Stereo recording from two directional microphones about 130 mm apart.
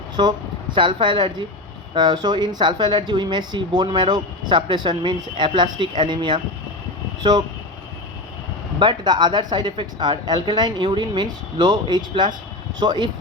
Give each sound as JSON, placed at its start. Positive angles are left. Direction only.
{"t": 0.2, "sound": "speech", "side_deg": -35}
{"t": 8.8, "sound": "speech", "side_deg": -35}